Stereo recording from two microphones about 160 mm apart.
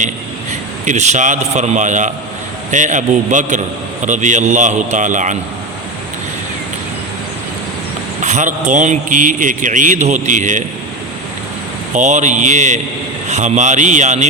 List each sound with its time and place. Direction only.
0.9 s speech: 45° right (ahead or behind)
8.2 s speech: 50° right (ahead or behind)
11.9 s speech: 50° right (ahead or behind)